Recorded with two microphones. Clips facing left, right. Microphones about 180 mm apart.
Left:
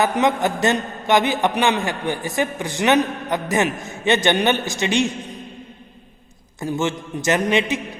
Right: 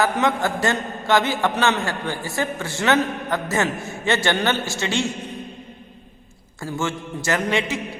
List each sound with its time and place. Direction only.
0.0 s a man's voice: 20° left (ahead or behind)
6.6 s a man's voice: 20° left (ahead or behind)